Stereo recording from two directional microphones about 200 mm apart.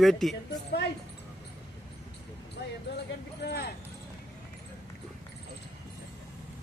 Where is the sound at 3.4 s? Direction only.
60° left (ahead or behind).